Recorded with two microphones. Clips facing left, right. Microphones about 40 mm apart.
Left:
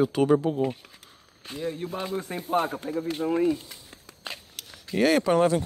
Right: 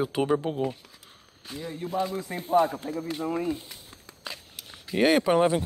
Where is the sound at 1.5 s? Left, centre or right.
Left.